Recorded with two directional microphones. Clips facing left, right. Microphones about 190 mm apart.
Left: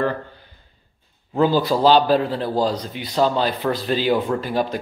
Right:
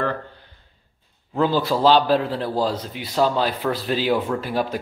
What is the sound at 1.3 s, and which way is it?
A man's voice, centre (ahead or behind).